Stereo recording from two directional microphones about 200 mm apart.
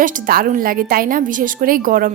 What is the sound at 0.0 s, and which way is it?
A woman's voice, 45° right (ahead or behind).